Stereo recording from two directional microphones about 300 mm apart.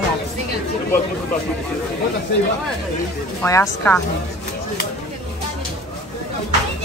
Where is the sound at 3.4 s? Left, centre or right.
Centre.